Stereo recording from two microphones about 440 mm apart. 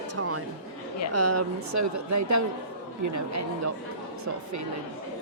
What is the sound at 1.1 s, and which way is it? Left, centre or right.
Speech, right.